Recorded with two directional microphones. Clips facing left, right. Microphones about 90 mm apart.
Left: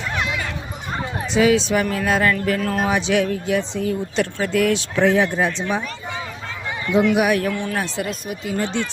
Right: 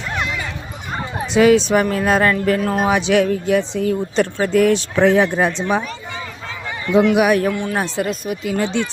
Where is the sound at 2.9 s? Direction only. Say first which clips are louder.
Right 5 dB; 60° right (ahead or behind); by 4.9 s 40° right (ahead or behind).